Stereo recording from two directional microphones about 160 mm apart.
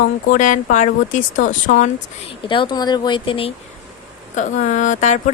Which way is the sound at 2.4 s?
30° left (ahead or behind).